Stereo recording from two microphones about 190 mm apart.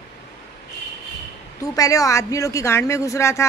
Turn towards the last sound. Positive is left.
turn(degrees=15)  # may be behind; listen again after turning